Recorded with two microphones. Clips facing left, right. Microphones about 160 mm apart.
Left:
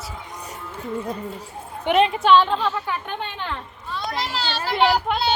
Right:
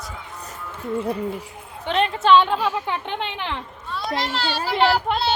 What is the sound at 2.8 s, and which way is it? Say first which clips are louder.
Speech: right 2 dB; 20° right (ahead or behind).